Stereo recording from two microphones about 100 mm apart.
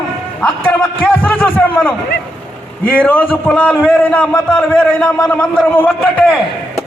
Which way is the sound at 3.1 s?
20° left (ahead or behind).